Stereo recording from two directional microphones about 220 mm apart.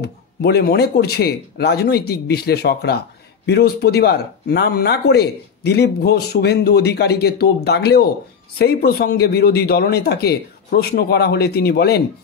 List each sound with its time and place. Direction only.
0.0 s speech: 45° left (ahead or behind)